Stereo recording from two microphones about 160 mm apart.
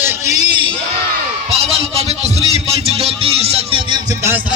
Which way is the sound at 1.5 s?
40° right (ahead or behind).